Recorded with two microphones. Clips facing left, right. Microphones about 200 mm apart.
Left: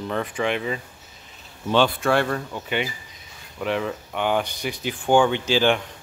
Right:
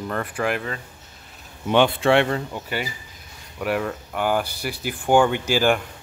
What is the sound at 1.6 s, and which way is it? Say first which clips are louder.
Speech: right 2 dB; 20° right (ahead or behind).